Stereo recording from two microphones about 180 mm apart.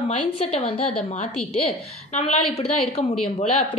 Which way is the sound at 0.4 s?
35° left (ahead or behind).